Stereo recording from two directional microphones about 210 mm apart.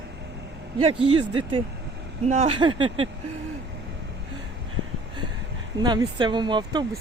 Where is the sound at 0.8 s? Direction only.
30° right (ahead or behind).